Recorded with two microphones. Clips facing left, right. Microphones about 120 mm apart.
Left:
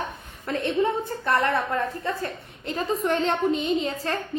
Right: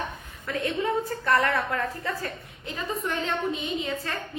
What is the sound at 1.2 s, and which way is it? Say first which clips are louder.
Speech: left 2 dB; 25° left (ahead or behind).